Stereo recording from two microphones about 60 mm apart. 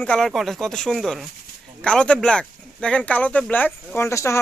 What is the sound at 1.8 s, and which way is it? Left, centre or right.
Speech, centre.